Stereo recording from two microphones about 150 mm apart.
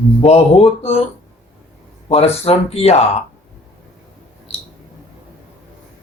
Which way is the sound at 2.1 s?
45° left (ahead or behind).